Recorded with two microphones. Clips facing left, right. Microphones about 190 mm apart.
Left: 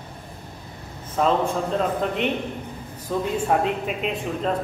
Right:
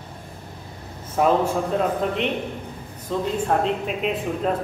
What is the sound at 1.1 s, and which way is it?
A man's voice, 10° right (ahead or behind).